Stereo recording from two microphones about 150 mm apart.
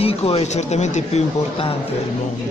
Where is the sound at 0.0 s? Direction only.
45° left (ahead or behind).